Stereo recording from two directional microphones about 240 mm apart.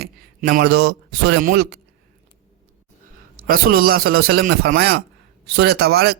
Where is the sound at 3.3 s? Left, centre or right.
Right.